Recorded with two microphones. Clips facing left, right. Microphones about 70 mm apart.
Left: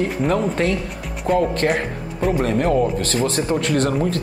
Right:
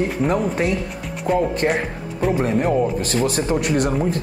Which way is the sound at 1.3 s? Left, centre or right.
Centre.